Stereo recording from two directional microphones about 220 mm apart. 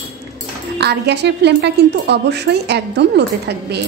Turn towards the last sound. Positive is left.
turn(degrees=-50)  # may be behind; listen again after turning